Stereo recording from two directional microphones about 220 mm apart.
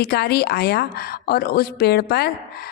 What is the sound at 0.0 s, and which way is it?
A woman's voice, 45° left (ahead or behind).